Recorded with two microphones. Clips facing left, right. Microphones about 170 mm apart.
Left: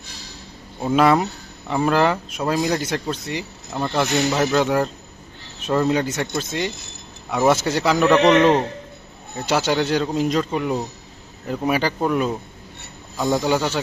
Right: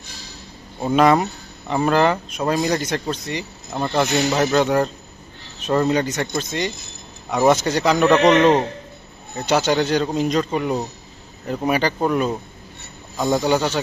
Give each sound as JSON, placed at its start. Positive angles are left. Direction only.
{"t": 0.8, "sound": "speech", "side_deg": 5}
{"t": 3.7, "sound": "speech", "side_deg": -10}
{"t": 8.2, "sound": "a man's voice", "side_deg": -15}
{"t": 9.5, "sound": "speech", "side_deg": 5}